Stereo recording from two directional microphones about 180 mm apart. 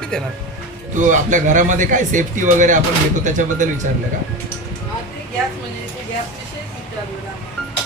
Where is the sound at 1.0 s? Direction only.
45° right (ahead or behind).